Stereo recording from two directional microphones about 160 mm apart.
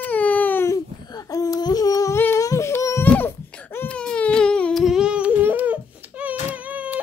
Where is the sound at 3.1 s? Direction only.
10° left (ahead or behind); by 7.0 s 10° right (ahead or behind).